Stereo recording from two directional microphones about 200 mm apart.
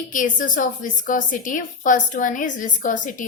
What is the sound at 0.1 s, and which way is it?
A woman's voice, 40° left (ahead or behind).